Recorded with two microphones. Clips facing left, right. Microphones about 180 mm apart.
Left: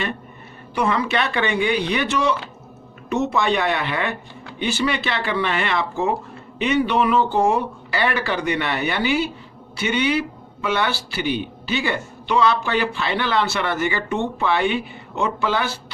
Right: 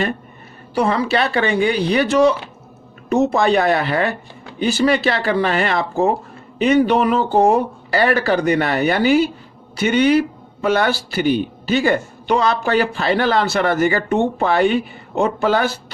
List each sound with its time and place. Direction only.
0.7 s speech: 35° right (ahead or behind)